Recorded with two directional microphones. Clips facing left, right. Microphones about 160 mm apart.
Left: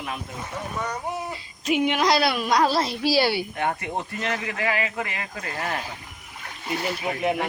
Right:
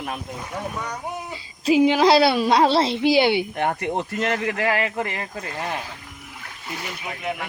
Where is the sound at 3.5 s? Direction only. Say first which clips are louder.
Right 2 dB; 35° right (ahead or behind).